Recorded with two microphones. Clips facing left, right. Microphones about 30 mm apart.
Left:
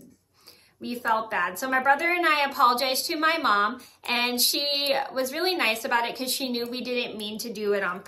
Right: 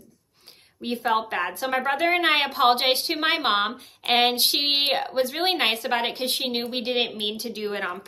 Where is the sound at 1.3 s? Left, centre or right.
Right.